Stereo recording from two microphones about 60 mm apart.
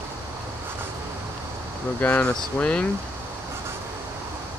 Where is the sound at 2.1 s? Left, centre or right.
Left.